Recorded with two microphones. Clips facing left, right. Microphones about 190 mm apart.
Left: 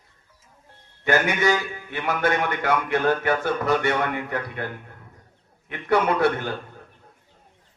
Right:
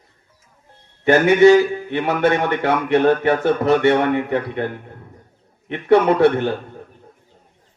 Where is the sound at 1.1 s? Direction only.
30° right (ahead or behind).